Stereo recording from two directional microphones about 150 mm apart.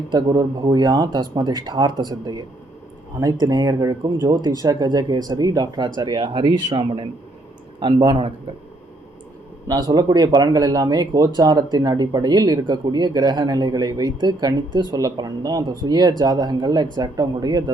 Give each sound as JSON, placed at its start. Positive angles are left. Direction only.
{"t": 0.1, "sound": "speech", "side_deg": -30}
{"t": 3.4, "sound": "speech", "side_deg": -25}
{"t": 9.6, "sound": "speech", "side_deg": -25}